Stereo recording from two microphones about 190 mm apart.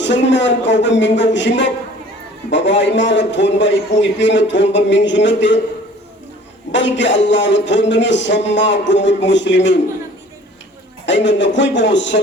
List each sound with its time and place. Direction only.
0.0 s a man's voice: 70° left (ahead or behind)
6.7 s a man's voice: 70° left (ahead or behind)
11.0 s a man's voice: 70° left (ahead or behind)